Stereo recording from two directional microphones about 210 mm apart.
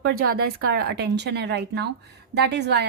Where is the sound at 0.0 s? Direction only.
45° right (ahead or behind).